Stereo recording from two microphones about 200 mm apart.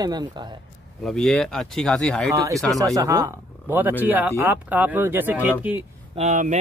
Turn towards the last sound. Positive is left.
turn(degrees=-35)  # may be behind; listen again after turning